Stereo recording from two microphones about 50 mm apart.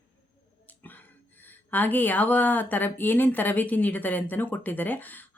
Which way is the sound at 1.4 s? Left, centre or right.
Left.